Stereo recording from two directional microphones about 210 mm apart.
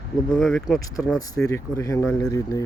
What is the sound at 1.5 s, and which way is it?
Speech, 15° left (ahead or behind).